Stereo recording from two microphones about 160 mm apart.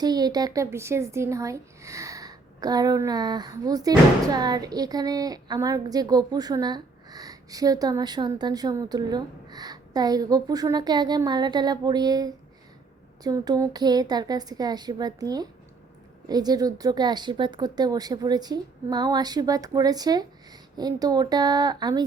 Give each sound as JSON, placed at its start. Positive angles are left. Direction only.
{"t": 0.0, "sound": "a woman's voice", "side_deg": -25}